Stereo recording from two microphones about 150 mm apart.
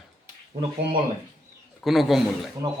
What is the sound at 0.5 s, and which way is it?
Speech, 50° right (ahead or behind).